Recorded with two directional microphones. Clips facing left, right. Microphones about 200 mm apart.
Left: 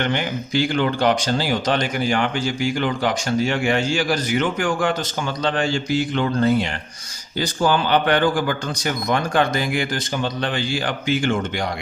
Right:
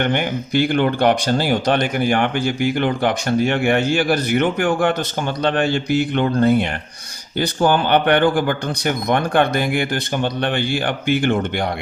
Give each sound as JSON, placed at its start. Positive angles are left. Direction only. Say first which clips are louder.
{"t": 0.0, "sound": "speech", "louder": "right 3 dB", "side_deg": -55}